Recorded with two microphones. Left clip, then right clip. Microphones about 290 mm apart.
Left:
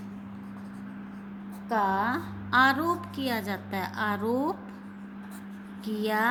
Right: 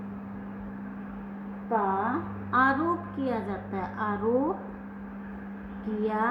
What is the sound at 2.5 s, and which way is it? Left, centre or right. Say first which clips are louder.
Music: left 2 dB; left.